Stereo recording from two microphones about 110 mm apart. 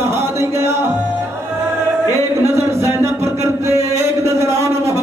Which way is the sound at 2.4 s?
25° right (ahead or behind).